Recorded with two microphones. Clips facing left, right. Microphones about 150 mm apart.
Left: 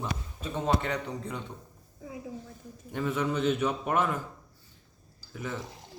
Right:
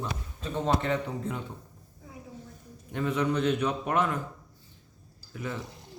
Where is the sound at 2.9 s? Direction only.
5° left (ahead or behind).